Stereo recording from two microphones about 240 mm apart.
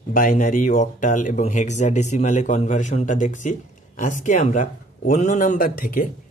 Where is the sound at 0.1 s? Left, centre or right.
Left.